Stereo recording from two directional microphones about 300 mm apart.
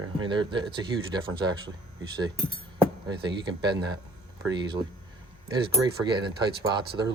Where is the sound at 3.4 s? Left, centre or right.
Centre.